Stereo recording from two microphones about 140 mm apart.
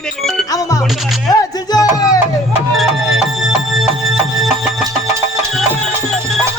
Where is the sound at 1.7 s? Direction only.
25° left (ahead or behind).